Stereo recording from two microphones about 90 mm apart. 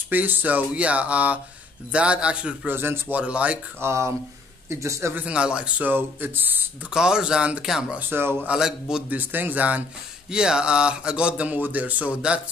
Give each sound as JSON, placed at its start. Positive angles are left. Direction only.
{"t": 0.1, "sound": "speech", "side_deg": -20}
{"t": 2.7, "sound": "speech", "side_deg": -25}
{"t": 3.8, "sound": "speech", "side_deg": -30}
{"t": 5.1, "sound": "speech", "side_deg": -15}
{"t": 6.9, "sound": "speech", "side_deg": -10}
{"t": 8.1, "sound": "speech", "side_deg": -25}
{"t": 8.5, "sound": "speech", "side_deg": -5}
{"t": 9.1, "sound": "speech", "side_deg": -20}